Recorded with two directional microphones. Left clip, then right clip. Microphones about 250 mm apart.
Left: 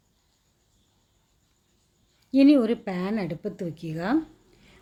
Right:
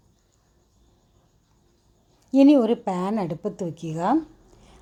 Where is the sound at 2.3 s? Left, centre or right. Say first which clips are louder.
Right 3 dB; centre.